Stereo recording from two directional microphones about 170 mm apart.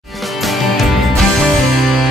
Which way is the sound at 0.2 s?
Centre (ahead or behind).